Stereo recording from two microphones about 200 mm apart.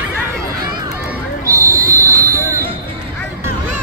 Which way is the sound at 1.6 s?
45° right (ahead or behind).